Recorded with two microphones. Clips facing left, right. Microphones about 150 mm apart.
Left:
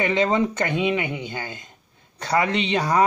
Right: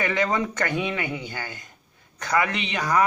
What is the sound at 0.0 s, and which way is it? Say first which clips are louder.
Speech: left 4 dB; 20° left (ahead or behind).